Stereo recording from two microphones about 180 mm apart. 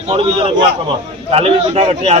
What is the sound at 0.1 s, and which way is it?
A man's voice, 35° right (ahead or behind).